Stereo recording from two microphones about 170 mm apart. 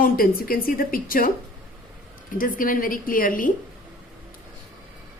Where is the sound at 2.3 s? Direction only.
55° left (ahead or behind).